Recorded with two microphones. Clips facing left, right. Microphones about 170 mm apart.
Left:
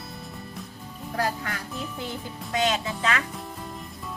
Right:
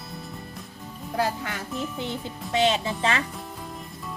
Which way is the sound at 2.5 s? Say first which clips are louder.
Right 3 dB; 25° right (ahead or behind).